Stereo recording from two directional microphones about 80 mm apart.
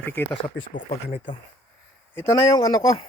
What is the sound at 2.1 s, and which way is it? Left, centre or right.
Speech, left.